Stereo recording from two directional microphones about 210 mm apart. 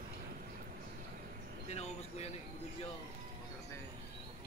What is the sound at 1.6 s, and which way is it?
Vehicle, 30° left (ahead or behind).